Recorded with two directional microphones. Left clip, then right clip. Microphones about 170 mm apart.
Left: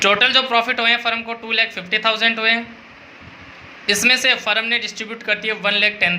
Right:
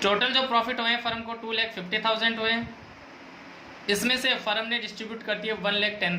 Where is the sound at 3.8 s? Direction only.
20° left (ahead or behind).